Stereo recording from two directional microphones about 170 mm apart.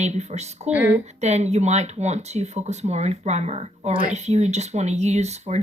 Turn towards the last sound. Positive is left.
turn(degrees=-40)  # may be behind; listen again after turning